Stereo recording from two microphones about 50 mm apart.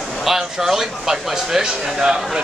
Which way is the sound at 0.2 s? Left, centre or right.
Centre.